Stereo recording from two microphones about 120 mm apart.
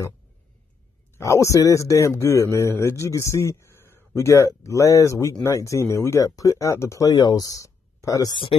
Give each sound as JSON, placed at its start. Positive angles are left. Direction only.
{"t": 1.1, "sound": "speech", "side_deg": 25}